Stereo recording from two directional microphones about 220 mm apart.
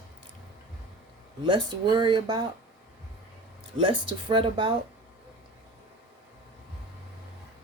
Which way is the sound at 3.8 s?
25° right (ahead or behind).